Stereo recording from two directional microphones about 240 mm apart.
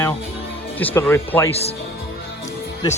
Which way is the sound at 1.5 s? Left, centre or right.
Left.